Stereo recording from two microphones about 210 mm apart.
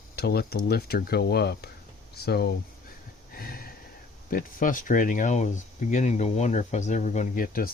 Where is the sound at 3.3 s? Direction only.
45° left (ahead or behind).